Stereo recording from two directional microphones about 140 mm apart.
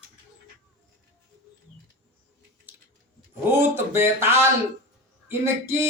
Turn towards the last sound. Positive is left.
turn(degrees=-20)  # may be behind; listen again after turning